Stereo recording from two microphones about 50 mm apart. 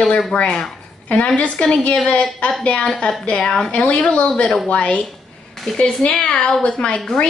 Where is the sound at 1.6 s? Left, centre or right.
Centre.